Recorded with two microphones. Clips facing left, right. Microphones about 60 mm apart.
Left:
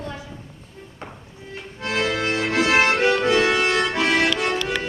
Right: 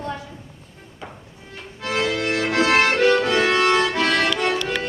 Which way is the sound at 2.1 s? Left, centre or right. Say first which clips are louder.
Right 1 dB; left.